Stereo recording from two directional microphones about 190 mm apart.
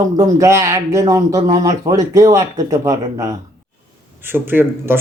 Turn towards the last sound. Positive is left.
turn(degrees=-10)  # may be behind; listen again after turning